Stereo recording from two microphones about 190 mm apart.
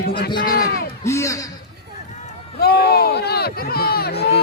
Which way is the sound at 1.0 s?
15° left (ahead or behind).